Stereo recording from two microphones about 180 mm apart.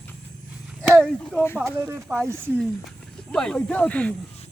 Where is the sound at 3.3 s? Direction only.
5° left (ahead or behind).